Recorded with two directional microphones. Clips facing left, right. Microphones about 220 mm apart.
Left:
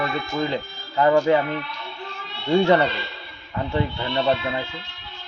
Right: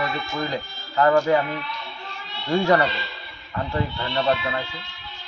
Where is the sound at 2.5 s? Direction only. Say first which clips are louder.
Left 2 dB; 25° left (ahead or behind).